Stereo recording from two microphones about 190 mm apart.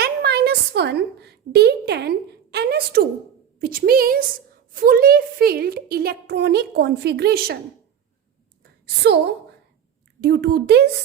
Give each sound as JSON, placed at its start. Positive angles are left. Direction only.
{"t": 0.0, "sound": "a sound", "side_deg": -60}
{"t": 3.6, "sound": "a woman's voice", "side_deg": -50}
{"t": 9.0, "sound": "a woman's voice", "side_deg": -60}